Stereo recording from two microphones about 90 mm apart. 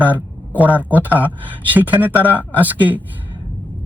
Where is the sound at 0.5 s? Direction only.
20° right (ahead or behind).